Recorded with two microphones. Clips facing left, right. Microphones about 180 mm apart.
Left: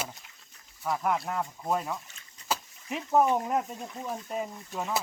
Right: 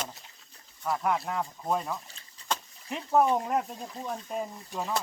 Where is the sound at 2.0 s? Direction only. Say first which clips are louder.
Right 2 dB; 30° right (ahead or behind).